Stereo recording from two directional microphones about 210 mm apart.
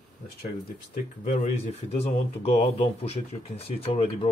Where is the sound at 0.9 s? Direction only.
35° left (ahead or behind).